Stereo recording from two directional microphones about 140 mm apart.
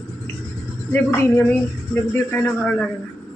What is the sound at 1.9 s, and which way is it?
Speech, 10° left (ahead or behind).